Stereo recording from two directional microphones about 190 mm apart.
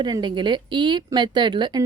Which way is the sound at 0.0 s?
25° right (ahead or behind).